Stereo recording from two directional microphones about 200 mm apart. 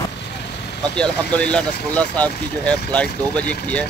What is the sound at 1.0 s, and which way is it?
Speech, 5° left (ahead or behind).